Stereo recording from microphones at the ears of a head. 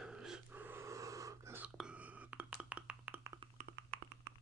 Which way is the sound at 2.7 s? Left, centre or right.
Right.